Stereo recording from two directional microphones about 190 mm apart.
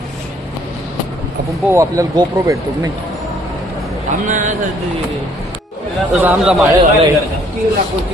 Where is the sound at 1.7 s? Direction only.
15° right (ahead or behind).